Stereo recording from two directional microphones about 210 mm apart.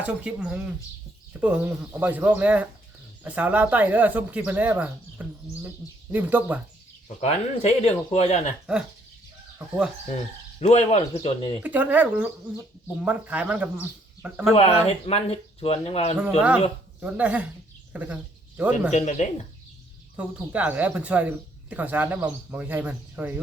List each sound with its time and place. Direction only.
0.0 s speech: 5° right (ahead or behind)
7.2 s speech: 30° left (ahead or behind)
10.6 s speech: 30° left (ahead or behind)
11.6 s speech: 10° right (ahead or behind)
14.5 s speech: 30° left (ahead or behind)
17.0 s speech: 5° right (ahead or behind)
18.9 s speech: 35° left (ahead or behind)
20.1 s speech: 5° right (ahead or behind)